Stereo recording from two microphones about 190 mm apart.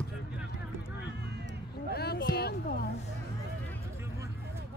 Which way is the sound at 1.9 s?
55° left (ahead or behind).